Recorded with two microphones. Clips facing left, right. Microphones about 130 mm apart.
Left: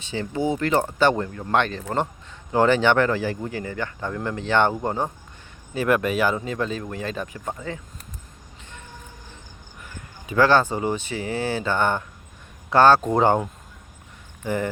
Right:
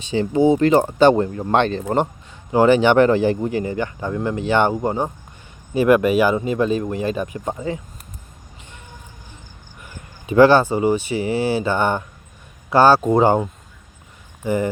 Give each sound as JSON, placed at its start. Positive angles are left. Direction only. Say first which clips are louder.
{"t": 0.1, "sound": "speech", "louder": "right 9 dB", "side_deg": -20}
{"t": 2.5, "sound": "speech", "louder": "right 4 dB", "side_deg": -10}
{"t": 10.2, "sound": "speech", "louder": "right 6 dB", "side_deg": -20}